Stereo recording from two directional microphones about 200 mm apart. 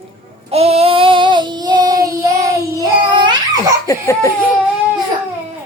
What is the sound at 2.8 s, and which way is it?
Babbling, 20° right (ahead or behind).